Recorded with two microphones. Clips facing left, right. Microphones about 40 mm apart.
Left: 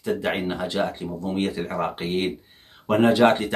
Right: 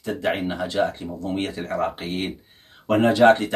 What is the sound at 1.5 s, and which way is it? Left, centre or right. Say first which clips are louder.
Speech: right 1 dB; centre.